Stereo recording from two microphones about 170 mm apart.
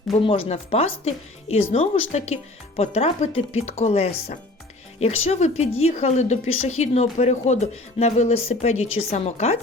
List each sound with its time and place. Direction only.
0.1 s speech: 35° left (ahead or behind)